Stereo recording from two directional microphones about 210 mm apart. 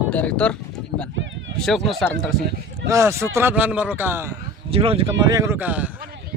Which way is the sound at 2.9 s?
15° right (ahead or behind).